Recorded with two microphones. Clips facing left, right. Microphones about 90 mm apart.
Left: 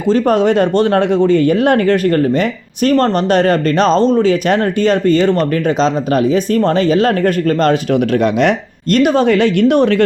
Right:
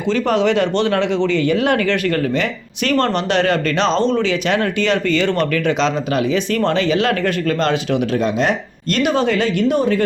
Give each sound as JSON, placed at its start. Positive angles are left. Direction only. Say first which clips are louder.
{"t": 0.1, "sound": "speech", "louder": "left 5 dB", "side_deg": 40}